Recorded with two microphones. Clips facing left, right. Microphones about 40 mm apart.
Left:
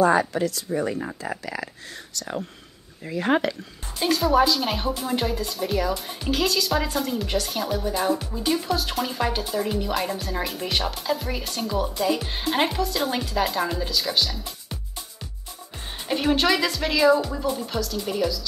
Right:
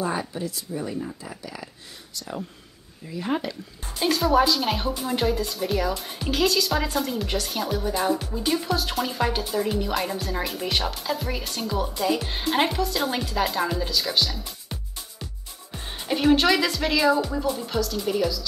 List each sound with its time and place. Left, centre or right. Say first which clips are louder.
0.0 s speech: left 8 dB; left
0.7 s speech: left 3 dB; left
1.3 s speech: left 6 dB; left
3.1 s speech: left 5 dB; left
4.0 s speech: even; centre
16.1 s speech: right 2 dB; centre